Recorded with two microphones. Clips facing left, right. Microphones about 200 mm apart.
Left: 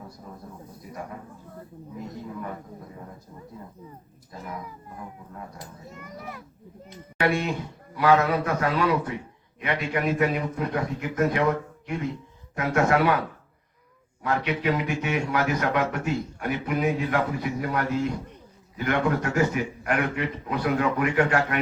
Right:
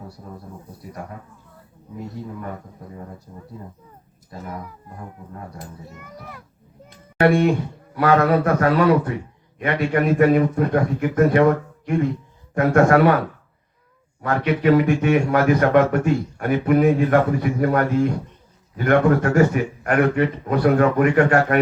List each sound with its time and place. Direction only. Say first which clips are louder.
7.2 s speech: right 9 dB; 55° right (ahead or behind)
14.2 s speech: right 5 dB; 50° right (ahead or behind)